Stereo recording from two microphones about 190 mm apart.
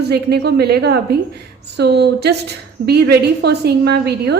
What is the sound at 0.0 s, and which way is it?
A woman's voice, 60° right (ahead or behind).